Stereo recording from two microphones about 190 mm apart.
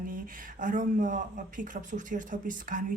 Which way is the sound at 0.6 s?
45° right (ahead or behind).